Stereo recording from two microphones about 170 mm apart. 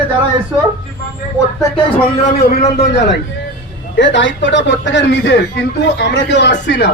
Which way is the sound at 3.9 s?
90° left.